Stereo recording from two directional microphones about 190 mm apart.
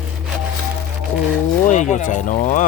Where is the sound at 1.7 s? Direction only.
40° left (ahead or behind).